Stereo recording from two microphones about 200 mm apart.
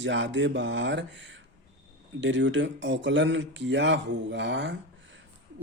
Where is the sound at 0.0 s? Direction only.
65° right (ahead or behind).